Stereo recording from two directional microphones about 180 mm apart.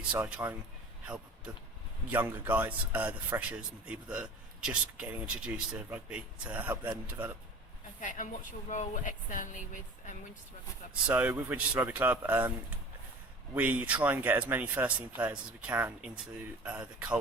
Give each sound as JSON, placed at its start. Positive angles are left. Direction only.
{"t": 0.1, "sound": "a man's voice", "side_deg": -5}
{"t": 2.0, "sound": "a man's voice", "side_deg": -10}
{"t": 8.0, "sound": "speech", "side_deg": 45}
{"t": 11.0, "sound": "a man's voice", "side_deg": -10}